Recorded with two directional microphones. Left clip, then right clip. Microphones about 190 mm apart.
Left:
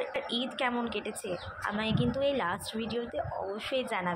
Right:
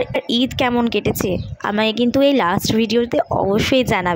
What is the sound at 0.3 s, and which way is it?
Speech, 55° right (ahead or behind).